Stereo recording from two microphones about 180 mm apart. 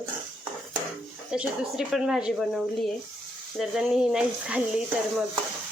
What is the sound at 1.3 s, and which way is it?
Speech, 5° right (ahead or behind).